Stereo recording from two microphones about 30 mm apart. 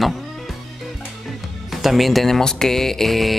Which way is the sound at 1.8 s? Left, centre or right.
Centre.